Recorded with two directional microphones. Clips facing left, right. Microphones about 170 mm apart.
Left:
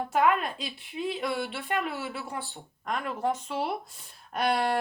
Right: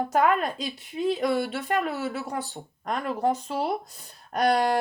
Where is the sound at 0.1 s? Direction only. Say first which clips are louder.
Right 1 dB; 40° right (ahead or behind).